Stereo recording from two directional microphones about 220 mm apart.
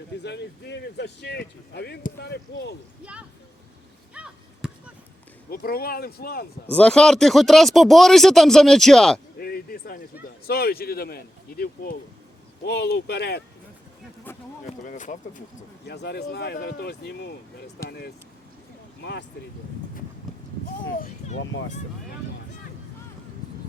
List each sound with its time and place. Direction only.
0.2 s speech: 50° left (ahead or behind)
4.1 s chop: 5° right (ahead or behind)
5.5 s speech: 45° left (ahead or behind)
6.7 s speech: 5° left (ahead or behind)
9.4 s chop: 45° left (ahead or behind)
10.4 s speech: 45° left (ahead or behind)
14.3 s a sound: 10° left (ahead or behind)
14.6 s speech: 35° left (ahead or behind)
15.9 s speech: 50° left (ahead or behind)
20.9 s a child's voice: 40° left (ahead or behind)